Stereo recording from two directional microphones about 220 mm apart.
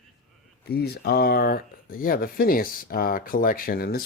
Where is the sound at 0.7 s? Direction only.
45° left (ahead or behind).